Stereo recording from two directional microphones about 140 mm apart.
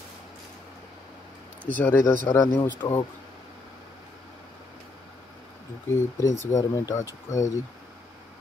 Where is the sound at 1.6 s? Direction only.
10° left (ahead or behind).